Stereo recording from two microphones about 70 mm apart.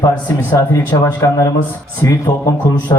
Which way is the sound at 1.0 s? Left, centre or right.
Left.